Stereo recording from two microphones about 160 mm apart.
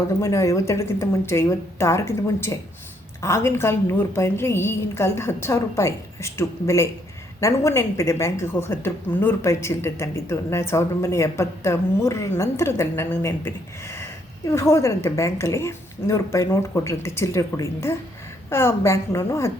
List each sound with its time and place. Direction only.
0.2 s a woman's voice: 20° left (ahead or behind)